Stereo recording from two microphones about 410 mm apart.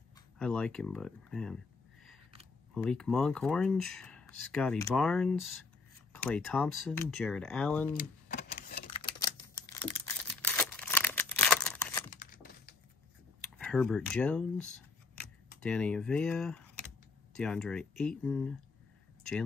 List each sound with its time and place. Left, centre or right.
0.4 s speech: centre
2.7 s speech: centre
8.3 s a sound: centre
9.2 s tearing: centre
12.1 s a sound: centre
13.6 s speech: centre